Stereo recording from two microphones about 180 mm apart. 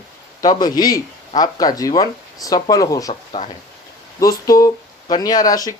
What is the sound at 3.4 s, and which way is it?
Speech, 35° left (ahead or behind).